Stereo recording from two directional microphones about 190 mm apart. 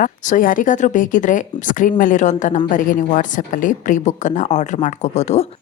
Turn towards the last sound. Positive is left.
turn(degrees=35)  # may be behind; listen again after turning